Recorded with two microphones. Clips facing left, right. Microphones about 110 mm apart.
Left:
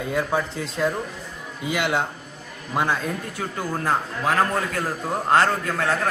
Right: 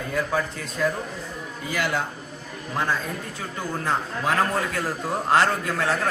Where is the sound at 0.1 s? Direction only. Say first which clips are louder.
Left 1 dB; 25° left (ahead or behind).